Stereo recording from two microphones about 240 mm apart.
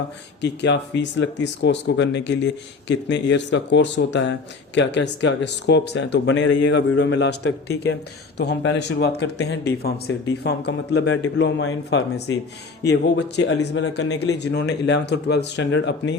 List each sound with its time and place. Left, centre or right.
0.4 s speech: left